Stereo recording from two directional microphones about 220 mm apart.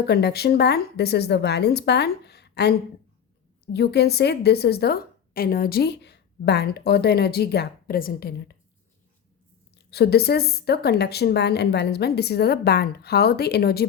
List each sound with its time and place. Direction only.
0.0 s a woman's voice: 45° left (ahead or behind)
9.7 s a woman's voice: 45° left (ahead or behind)